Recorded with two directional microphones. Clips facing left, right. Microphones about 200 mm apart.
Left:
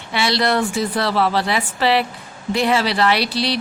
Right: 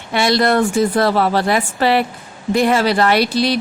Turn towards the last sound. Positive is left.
turn(degrees=-50)  # may be behind; listen again after turning